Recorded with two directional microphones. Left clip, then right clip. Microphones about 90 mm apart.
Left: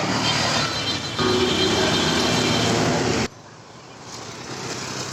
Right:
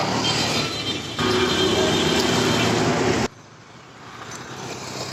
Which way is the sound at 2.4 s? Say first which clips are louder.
Even; 30° left (ahead or behind).